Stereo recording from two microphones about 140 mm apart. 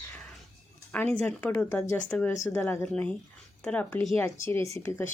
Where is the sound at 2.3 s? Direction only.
20° left (ahead or behind).